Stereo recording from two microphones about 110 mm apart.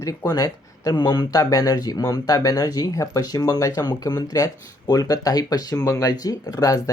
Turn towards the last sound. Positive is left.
turn(degrees=35)  # may be behind; listen again after turning